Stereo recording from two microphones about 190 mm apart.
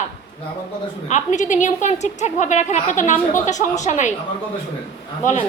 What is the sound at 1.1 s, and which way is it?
A woman's voice, 40° left (ahead or behind).